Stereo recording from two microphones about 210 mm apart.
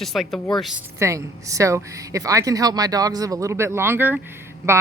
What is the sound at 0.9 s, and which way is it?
Speech, 15° right (ahead or behind).